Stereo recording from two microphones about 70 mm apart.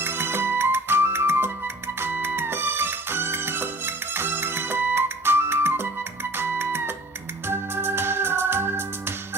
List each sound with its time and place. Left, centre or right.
0.0 s music: right
7.4 s organ: right